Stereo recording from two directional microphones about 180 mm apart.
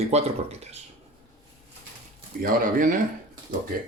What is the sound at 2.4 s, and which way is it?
Speech, 50° right (ahead or behind).